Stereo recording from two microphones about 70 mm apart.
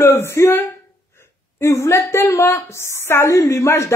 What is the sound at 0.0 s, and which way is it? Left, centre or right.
A woman's voice, left.